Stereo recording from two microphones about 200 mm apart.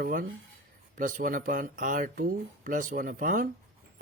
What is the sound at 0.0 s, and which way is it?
Speech, 45° right (ahead or behind).